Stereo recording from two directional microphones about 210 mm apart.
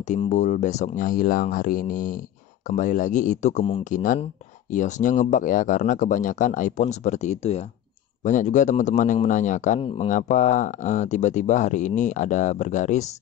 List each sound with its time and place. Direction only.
0.0 s a man's voice: 35° left (ahead or behind)